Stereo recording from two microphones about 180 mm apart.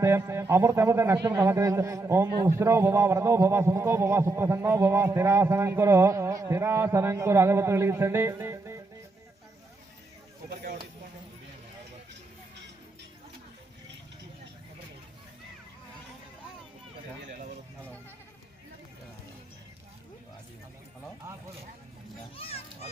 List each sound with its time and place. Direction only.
0.0 s a man's voice: 15° right (ahead or behind)
21.2 s vehicle: 15° right (ahead or behind)
22.4 s children playing: 35° left (ahead or behind)